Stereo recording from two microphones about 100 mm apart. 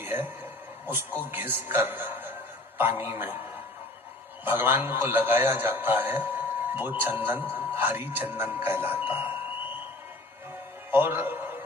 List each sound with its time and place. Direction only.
0.0 s speech: 20° right (ahead or behind)
1.3 s a man's voice: 20° right (ahead or behind)
4.4 s a man's voice: 20° right (ahead or behind)
10.9 s music: 20° right (ahead or behind)